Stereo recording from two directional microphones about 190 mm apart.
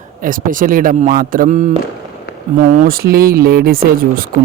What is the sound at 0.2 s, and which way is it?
Speech, 45° right (ahead or behind).